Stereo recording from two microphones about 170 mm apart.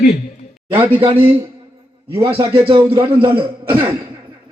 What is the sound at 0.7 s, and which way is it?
Speech, 10° right (ahead or behind).